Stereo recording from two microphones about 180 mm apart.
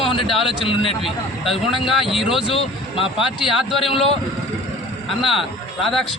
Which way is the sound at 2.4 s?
30° left (ahead or behind).